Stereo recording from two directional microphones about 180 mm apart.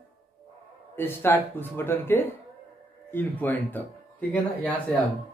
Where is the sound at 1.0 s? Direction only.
10° left (ahead or behind).